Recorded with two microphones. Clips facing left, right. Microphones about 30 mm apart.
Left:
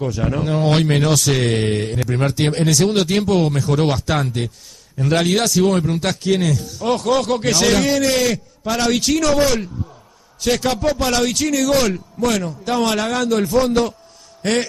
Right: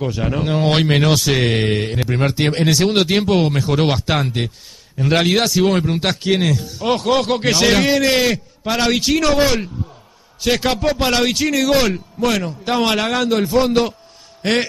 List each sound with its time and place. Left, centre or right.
0.0 s a man's voice: right
8.9 s speech: centre
9.2 s a man's voice: right
11.2 s a man's voice: centre